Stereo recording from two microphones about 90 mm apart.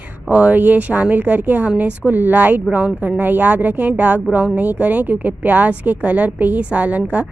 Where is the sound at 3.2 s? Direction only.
20° right (ahead or behind).